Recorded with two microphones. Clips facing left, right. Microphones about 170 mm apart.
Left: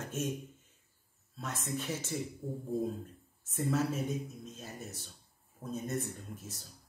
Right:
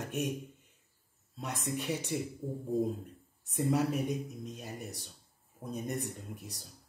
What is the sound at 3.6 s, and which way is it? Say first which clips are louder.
Speech: right 2 dB; 15° right (ahead or behind).